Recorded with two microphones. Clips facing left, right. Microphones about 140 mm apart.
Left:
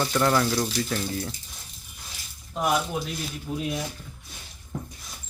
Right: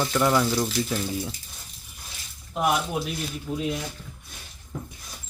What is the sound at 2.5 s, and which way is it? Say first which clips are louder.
Speech: right 1 dB; 5° right (ahead or behind).